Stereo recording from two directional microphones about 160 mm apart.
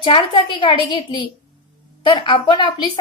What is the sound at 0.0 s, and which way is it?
A woman's voice, 30° left (ahead or behind).